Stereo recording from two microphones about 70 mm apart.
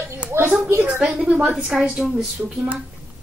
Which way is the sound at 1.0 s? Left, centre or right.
Centre.